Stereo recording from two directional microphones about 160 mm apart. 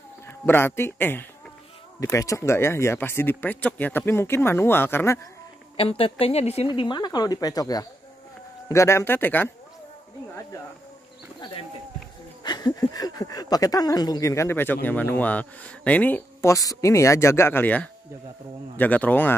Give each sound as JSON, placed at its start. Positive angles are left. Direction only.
{"t": 0.3, "sound": "speech", "side_deg": 15}
{"t": 5.8, "sound": "speech", "side_deg": 35}
{"t": 6.7, "sound": "speech", "side_deg": 30}
{"t": 12.4, "sound": "speech", "side_deg": 25}